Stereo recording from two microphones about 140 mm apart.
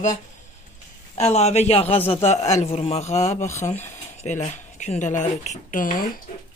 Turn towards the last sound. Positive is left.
turn(degrees=80)